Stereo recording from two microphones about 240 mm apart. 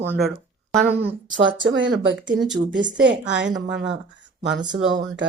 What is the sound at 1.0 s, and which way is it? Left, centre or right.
Speech, right.